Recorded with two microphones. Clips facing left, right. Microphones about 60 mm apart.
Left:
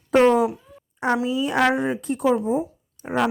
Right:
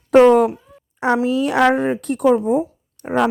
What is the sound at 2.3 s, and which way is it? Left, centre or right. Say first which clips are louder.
Speech: right 6 dB; right.